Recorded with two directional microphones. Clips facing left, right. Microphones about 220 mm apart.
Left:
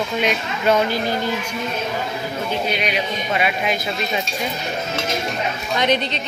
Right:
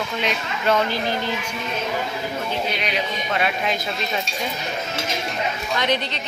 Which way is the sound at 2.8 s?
10° left (ahead or behind).